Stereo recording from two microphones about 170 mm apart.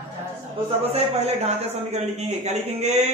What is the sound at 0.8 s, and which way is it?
A man's voice, 35° right (ahead or behind).